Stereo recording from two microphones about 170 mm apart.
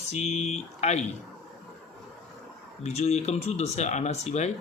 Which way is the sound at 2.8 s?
40° left (ahead or behind).